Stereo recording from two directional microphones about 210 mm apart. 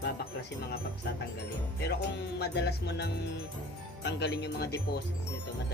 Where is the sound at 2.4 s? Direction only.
50° left (ahead or behind).